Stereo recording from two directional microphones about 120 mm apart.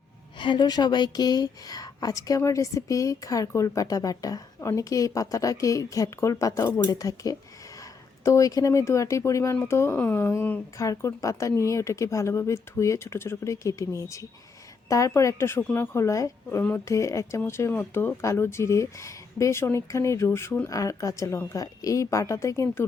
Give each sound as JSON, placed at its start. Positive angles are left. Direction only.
{"t": 0.3, "sound": "a woman's voice", "side_deg": 40}